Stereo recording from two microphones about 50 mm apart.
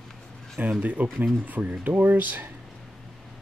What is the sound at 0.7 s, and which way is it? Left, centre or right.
Speech, right.